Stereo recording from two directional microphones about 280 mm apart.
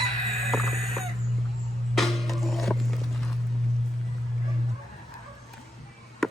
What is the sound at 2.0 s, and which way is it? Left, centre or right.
Music, centre.